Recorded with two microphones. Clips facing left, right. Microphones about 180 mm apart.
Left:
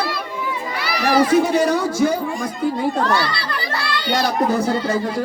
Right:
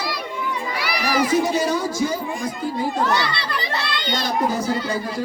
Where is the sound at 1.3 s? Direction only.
60° left (ahead or behind).